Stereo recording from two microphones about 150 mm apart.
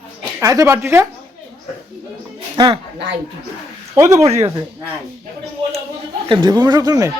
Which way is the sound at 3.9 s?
20° right (ahead or behind).